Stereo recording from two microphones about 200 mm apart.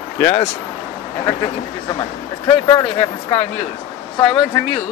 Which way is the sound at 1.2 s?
20° left (ahead or behind).